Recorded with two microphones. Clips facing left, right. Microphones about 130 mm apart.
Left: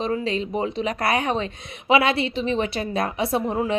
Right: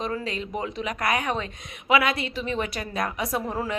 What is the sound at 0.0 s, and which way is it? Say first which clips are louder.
A woman's voice: left 5 dB; 25° left (ahead or behind).